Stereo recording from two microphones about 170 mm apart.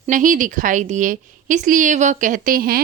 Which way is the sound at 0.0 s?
50° right (ahead or behind).